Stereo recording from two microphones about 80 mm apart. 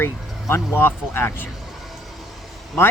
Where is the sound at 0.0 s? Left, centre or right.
Left.